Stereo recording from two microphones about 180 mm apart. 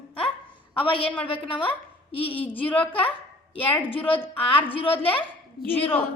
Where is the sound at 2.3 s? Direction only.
10° left (ahead or behind).